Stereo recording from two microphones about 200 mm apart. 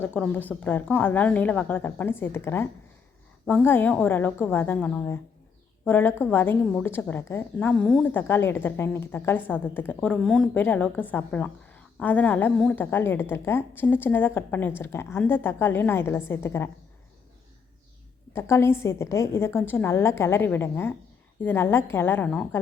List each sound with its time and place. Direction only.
0.0 s a woman's voice: 10° left (ahead or behind)
18.3 s a woman's voice: 15° left (ahead or behind)